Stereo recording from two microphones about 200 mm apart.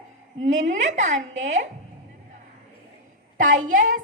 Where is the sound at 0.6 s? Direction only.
35° right (ahead or behind).